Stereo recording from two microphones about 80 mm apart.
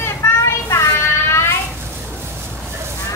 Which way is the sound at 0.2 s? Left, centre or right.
Left.